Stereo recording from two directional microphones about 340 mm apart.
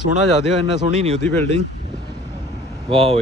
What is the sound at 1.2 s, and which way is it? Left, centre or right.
Speech, centre.